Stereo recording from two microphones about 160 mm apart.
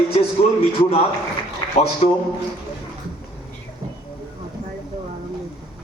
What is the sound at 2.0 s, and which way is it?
Speech, 45° left (ahead or behind).